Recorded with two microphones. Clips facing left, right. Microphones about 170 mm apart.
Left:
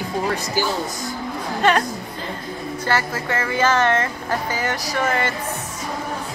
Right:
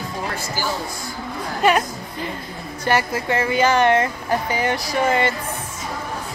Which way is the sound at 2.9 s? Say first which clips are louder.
Right 3 dB; 15° right (ahead or behind).